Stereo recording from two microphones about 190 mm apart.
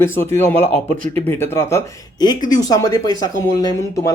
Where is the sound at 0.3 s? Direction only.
15° left (ahead or behind).